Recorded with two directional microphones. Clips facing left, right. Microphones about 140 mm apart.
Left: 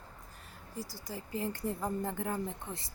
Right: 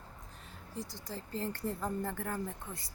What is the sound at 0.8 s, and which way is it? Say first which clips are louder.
Speech: left 1 dB; 10° left (ahead or behind).